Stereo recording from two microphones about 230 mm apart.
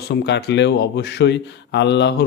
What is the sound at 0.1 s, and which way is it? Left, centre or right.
Speech, left.